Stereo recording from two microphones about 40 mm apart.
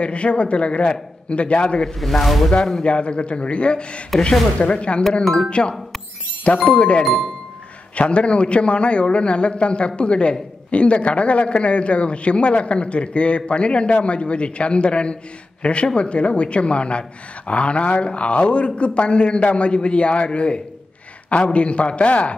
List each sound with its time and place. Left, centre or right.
0.0 s speech: left
2.0 s speech: centre
2.5 s speech: left
5.2 s speech: centre
5.5 s a man's voice: left